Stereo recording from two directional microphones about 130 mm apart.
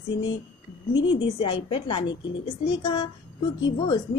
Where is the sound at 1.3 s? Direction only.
40° left (ahead or behind).